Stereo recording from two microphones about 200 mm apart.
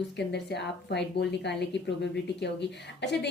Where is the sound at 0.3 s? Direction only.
60° left (ahead or behind).